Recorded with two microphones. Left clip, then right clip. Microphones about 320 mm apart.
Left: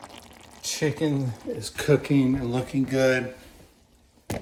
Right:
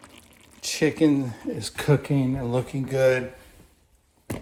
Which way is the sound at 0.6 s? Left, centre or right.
Right.